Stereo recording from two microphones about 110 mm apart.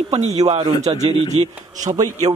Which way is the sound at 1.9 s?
35° right (ahead or behind).